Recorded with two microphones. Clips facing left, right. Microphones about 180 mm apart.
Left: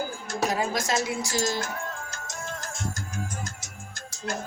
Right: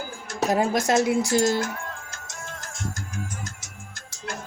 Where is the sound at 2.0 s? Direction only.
35° left (ahead or behind).